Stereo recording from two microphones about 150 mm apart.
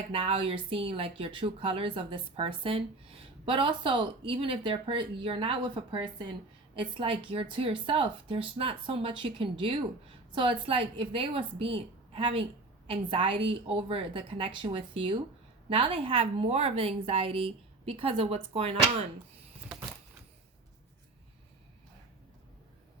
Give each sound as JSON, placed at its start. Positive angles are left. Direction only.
{"t": 0.1, "sound": "a woman's voice", "side_deg": -40}